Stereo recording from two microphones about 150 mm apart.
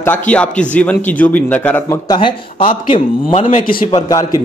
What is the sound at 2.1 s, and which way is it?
Speech, 35° left (ahead or behind).